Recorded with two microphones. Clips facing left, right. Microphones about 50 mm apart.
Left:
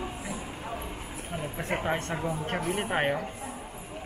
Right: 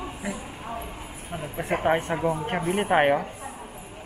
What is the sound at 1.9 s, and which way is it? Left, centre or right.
Speech, centre.